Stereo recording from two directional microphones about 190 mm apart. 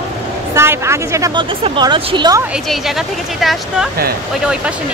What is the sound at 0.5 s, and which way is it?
A woman's voice, 15° right (ahead or behind).